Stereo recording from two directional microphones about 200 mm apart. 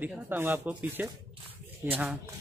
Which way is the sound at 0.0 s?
10° right (ahead or behind).